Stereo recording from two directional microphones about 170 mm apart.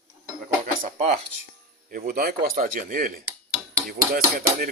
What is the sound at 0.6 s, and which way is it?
Speech, 50° right (ahead or behind).